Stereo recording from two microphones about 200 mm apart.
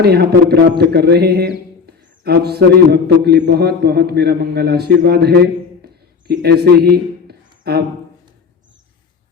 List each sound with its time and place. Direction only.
0.0 s a man's voice: 55° right (ahead or behind)
0.8 s music: 55° right (ahead or behind)
2.2 s a man's voice: 55° right (ahead or behind)